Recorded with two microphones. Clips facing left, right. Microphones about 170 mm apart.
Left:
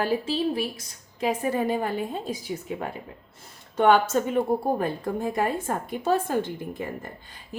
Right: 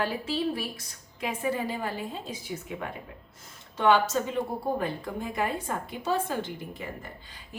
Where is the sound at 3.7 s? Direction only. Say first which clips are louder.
Left 4 dB; 50° left (ahead or behind).